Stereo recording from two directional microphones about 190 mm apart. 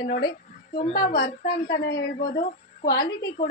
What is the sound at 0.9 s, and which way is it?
A woman's voice, 60° left (ahead or behind).